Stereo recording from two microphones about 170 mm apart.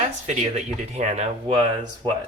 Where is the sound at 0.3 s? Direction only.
40° right (ahead or behind).